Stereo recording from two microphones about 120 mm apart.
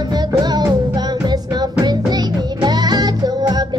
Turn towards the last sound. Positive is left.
turn(degrees=-35)  # may be behind; listen again after turning